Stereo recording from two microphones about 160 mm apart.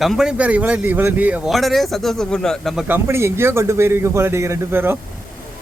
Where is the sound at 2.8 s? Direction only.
15° right (ahead or behind).